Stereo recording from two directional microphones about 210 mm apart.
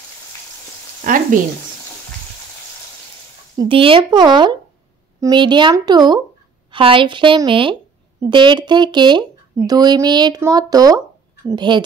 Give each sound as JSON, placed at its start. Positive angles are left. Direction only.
{"t": 1.0, "sound": "speech", "side_deg": -40}
{"t": 3.5, "sound": "speech", "side_deg": -25}